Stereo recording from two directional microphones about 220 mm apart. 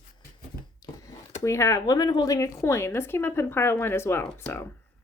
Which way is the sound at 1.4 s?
15° left (ahead or behind).